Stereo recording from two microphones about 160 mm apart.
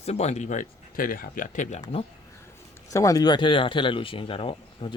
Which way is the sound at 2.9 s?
20° left (ahead or behind).